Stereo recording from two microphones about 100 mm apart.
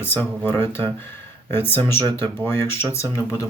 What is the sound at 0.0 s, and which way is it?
Speech, 20° left (ahead or behind).